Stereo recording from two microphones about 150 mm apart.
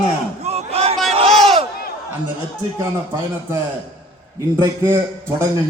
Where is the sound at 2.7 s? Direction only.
15° right (ahead or behind).